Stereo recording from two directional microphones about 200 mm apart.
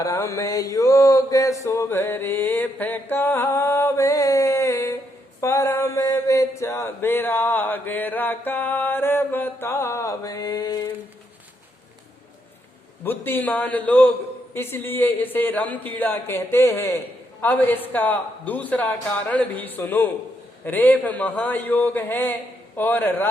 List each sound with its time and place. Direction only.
0.0 s mantra: 15° left (ahead or behind)
13.1 s mantra: 10° left (ahead or behind)